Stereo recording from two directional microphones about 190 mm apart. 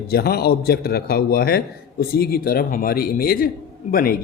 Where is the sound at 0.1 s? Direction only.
55° left (ahead or behind).